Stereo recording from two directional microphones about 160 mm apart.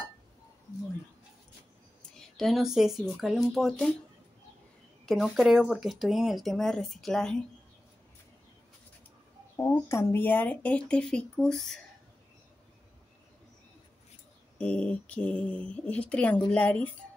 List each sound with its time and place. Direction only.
2.1 s speech: centre (ahead or behind)
5.0 s speech: centre (ahead or behind)
9.6 s speech: 15° left (ahead or behind)
14.6 s speech: 10° left (ahead or behind)